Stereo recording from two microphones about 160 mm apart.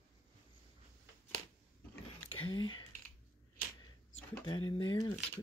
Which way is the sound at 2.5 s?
30° left (ahead or behind).